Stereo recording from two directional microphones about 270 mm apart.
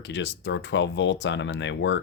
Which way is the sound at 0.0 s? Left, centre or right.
Left.